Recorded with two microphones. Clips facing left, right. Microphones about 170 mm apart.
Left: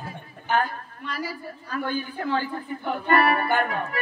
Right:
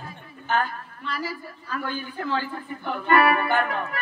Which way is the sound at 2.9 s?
35° left (ahead or behind).